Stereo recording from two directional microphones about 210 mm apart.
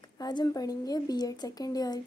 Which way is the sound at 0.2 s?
20° left (ahead or behind).